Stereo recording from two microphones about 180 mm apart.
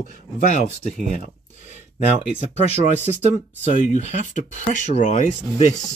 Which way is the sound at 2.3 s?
40° right (ahead or behind).